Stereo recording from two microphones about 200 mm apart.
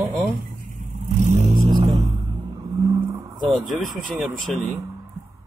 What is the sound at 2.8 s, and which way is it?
Vehicle, 15° right (ahead or behind).